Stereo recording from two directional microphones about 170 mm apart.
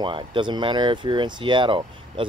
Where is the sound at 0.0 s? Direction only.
30° right (ahead or behind).